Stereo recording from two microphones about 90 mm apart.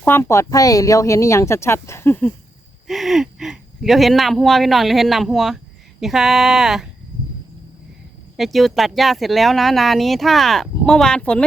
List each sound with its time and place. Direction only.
0.1 s speech: 30° left (ahead or behind)
2.8 s speech: centre (ahead or behind)
8.4 s speech: centre (ahead or behind)